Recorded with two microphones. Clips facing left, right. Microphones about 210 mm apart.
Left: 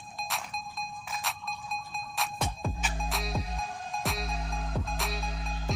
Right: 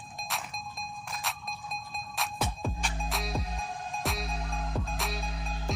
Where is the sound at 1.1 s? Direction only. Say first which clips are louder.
Even; centre (ahead or behind).